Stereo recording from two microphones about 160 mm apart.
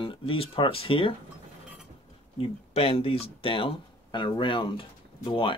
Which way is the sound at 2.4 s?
35° left (ahead or behind).